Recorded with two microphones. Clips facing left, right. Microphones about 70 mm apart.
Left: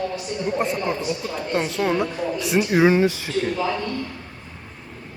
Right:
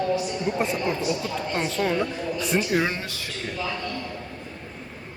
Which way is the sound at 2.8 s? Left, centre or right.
Centre.